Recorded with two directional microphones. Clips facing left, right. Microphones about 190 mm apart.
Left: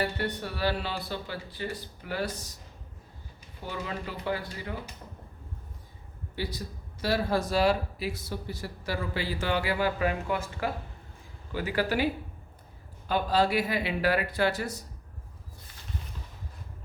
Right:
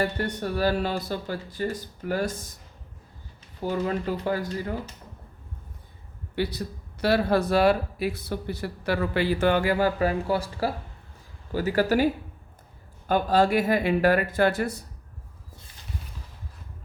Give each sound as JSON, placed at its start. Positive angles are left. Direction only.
{"t": 0.0, "sound": "speech", "side_deg": -45}
{"t": 3.6, "sound": "speech", "side_deg": -45}
{"t": 6.3, "sound": "a man's voice", "side_deg": -65}
{"t": 13.1, "sound": "speech", "side_deg": -50}